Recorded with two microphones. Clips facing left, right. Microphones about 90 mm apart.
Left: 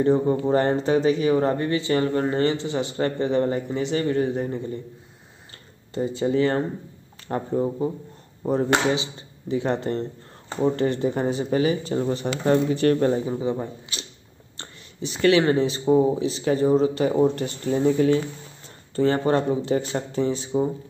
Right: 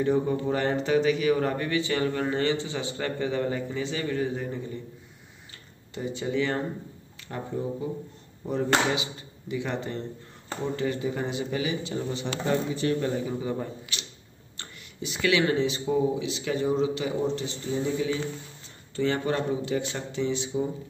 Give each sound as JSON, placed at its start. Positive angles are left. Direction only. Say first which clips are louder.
{"t": 0.0, "sound": "speech", "louder": "left 5 dB", "side_deg": 35}
{"t": 5.9, "sound": "speech", "louder": "left 6 dB", "side_deg": 35}
{"t": 10.6, "sound": "speech", "louder": "left 7 dB", "side_deg": 50}
{"t": 13.1, "sound": "speech", "louder": "left 5 dB", "side_deg": 30}
{"t": 13.9, "sound": "a sound", "louder": "left 2 dB", "side_deg": 35}
{"t": 14.6, "sound": "speech", "louder": "left 4 dB", "side_deg": 35}
{"t": 18.9, "sound": "speech", "louder": "left 6 dB", "side_deg": 40}